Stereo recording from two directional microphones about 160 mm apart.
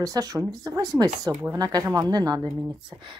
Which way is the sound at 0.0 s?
25° right (ahead or behind).